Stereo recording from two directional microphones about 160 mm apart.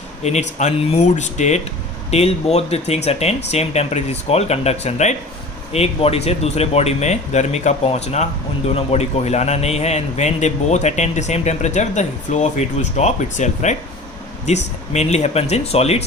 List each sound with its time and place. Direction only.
0.2 s a man's voice: 45° left (ahead or behind)